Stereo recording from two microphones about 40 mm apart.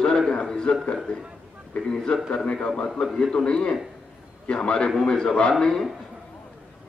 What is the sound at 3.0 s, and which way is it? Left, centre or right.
Speech, centre.